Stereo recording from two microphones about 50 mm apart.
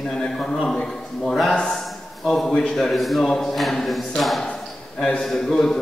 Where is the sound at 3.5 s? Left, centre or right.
Centre.